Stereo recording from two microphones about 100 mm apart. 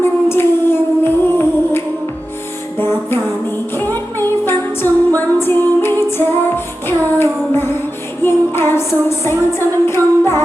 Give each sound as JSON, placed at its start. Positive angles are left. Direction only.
{"t": 0.0, "sound": "singing", "side_deg": 25}
{"t": 2.7, "sound": "music", "side_deg": 25}
{"t": 6.8, "sound": "child singing", "side_deg": 25}
{"t": 8.2, "sound": "music", "side_deg": 25}